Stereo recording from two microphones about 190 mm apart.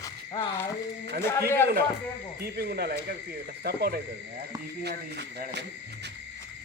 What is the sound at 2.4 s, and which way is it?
Speech, 55° right (ahead or behind).